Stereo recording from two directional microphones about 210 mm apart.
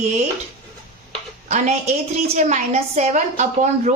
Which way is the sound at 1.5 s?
35° right (ahead or behind).